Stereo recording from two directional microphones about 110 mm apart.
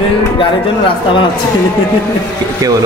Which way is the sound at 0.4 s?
50° left (ahead or behind).